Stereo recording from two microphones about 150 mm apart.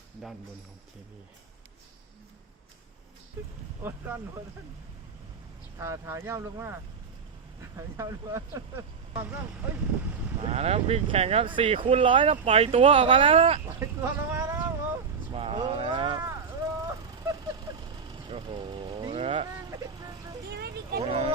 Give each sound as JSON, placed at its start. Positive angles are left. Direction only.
{"t": 5.8, "sound": "speech", "side_deg": -20}
{"t": 7.8, "sound": "speech", "side_deg": -20}
{"t": 10.4, "sound": "speech", "side_deg": -45}
{"t": 13.7, "sound": "speech", "side_deg": -15}
{"t": 14.4, "sound": "boat", "side_deg": -15}
{"t": 15.3, "sound": "a sound", "side_deg": -40}
{"t": 16.2, "sound": "vehicle", "side_deg": -20}
{"t": 19.6, "sound": "vehicle", "side_deg": -25}
{"t": 20.6, "sound": "a sound", "side_deg": -90}
{"t": 21.0, "sound": "speech", "side_deg": -40}